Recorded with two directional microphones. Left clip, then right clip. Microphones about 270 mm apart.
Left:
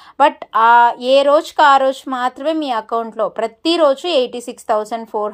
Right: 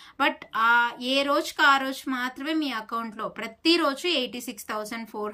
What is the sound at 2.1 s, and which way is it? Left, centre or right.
Speech, left.